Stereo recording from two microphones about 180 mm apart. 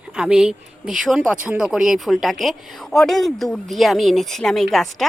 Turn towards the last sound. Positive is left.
turn(degrees=0)  # may be behind; listen again after turning